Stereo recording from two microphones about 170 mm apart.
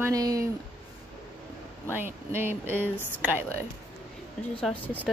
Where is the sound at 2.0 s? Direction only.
10° right (ahead or behind).